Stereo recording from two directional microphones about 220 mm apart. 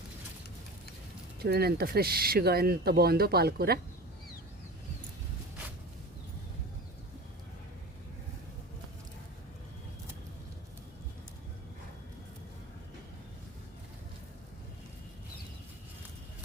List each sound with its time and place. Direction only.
1.4 s speech: 45° right (ahead or behind)